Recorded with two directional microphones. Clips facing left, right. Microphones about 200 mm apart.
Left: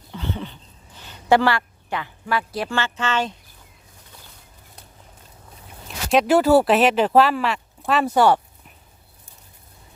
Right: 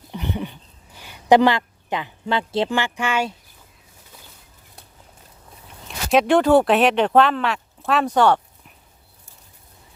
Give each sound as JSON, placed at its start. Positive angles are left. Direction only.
{"t": 0.1, "sound": "a woman's voice", "side_deg": -15}
{"t": 6.1, "sound": "speech", "side_deg": 5}